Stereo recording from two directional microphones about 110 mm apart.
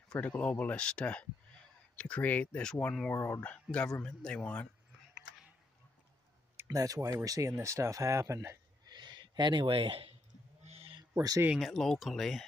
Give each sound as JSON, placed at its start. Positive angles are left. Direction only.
{"t": 0.1, "sound": "speech", "side_deg": 10}
{"t": 3.2, "sound": "speech", "side_deg": 30}
{"t": 3.7, "sound": "speech", "side_deg": -5}
{"t": 4.0, "sound": "speech", "side_deg": 10}
{"t": 6.7, "sound": "speech", "side_deg": -35}
{"t": 8.8, "sound": "a sound", "side_deg": -40}
{"t": 10.6, "sound": "owl", "side_deg": -65}
{"t": 11.6, "sound": "speech", "side_deg": 0}